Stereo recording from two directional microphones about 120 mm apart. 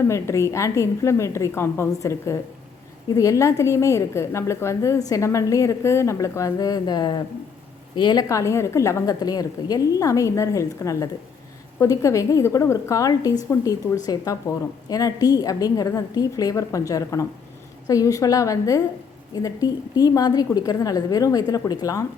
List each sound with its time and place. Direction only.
0.1 s a woman's voice: 25° left (ahead or behind)